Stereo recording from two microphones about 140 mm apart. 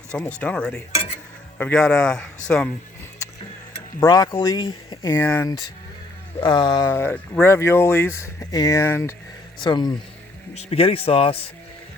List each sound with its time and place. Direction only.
0.3 s cutlery: 5° left (ahead or behind)
1.5 s speech: 10° left (ahead or behind)
2.5 s cutlery: 10° left (ahead or behind)
4.0 s speech: 30° left (ahead or behind)
5.2 s cutlery: 10° left (ahead or behind)
6.4 s speech: 35° left (ahead or behind)
6.9 s cutlery: 15° left (ahead or behind)
7.4 s speech: 20° left (ahead or behind)
9.6 s speech: 30° left (ahead or behind)
10.5 s speech: 50° left (ahead or behind)